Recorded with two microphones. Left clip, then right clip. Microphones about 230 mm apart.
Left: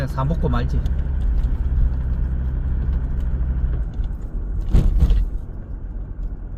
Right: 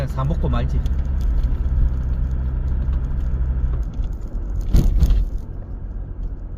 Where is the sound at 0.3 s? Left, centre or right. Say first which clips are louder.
Left 2 dB; centre.